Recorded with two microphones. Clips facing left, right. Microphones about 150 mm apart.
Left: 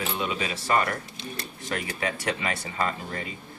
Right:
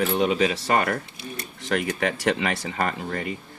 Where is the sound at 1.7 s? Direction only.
65° right (ahead or behind).